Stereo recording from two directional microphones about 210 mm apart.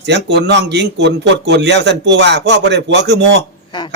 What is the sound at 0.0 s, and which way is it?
A man's voice, 55° right (ahead or behind).